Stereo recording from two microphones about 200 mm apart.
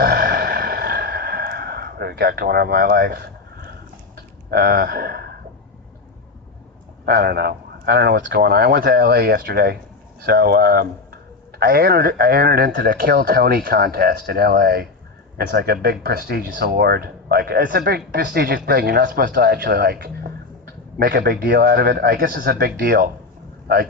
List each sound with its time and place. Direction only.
0.0 s a sound: 50° right (ahead or behind)
4.5 s speech: 50° right (ahead or behind)
7.0 s speech: 50° right (ahead or behind)